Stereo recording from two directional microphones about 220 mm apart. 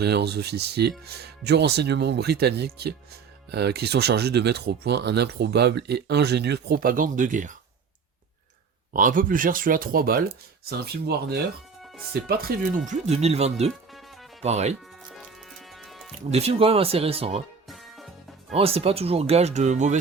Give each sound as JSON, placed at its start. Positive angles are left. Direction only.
{"t": 0.0, "sound": "speech", "side_deg": -50}
{"t": 8.9, "sound": "speech", "side_deg": -35}
{"t": 12.9, "sound": "speech", "side_deg": -30}
{"t": 15.8, "sound": "music", "side_deg": 0}
{"t": 16.3, "sound": "speech", "side_deg": -25}
{"t": 17.7, "sound": "music", "side_deg": 0}
{"t": 18.5, "sound": "speech", "side_deg": -25}